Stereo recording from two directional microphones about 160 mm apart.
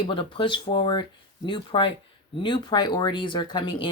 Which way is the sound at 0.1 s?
30° left (ahead or behind).